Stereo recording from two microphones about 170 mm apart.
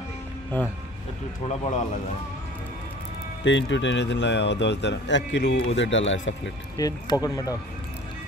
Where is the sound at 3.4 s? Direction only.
90° left.